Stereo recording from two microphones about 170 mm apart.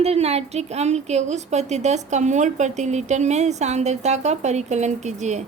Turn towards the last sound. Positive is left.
turn(degrees=-45)  # may be behind; listen again after turning